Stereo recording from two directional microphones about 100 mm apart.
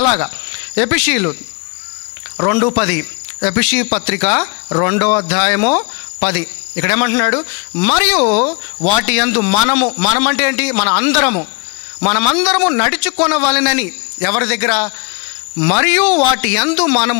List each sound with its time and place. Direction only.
0.2 s speech: 20° left (ahead or behind)
2.4 s a man's voice: 20° left (ahead or behind)